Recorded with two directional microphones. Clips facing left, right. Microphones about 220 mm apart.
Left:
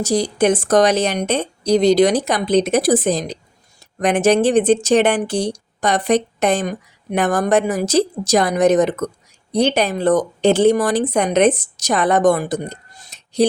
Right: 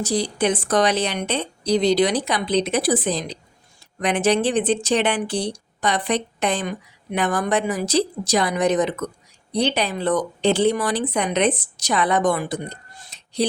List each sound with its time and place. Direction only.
0.0 s a woman's voice: 45° left (ahead or behind)